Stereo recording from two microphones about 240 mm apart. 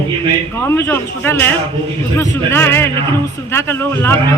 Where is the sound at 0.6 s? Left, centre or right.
Centre.